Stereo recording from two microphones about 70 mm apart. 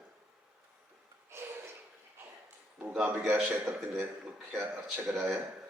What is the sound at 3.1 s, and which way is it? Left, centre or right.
Speech, right.